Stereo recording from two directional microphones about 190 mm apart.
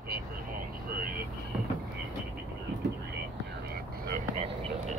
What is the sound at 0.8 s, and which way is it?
Vehicle, 50° right (ahead or behind).